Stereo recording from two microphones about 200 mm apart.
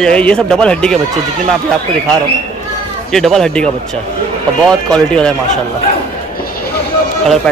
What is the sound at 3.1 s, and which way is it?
Speech, centre (ahead or behind).